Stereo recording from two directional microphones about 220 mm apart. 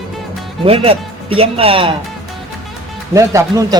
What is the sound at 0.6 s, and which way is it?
Speech, 25° right (ahead or behind).